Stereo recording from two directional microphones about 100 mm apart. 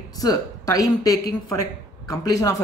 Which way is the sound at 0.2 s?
35° left (ahead or behind).